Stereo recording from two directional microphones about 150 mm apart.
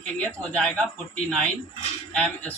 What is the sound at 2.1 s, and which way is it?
Speech, 10° left (ahead or behind).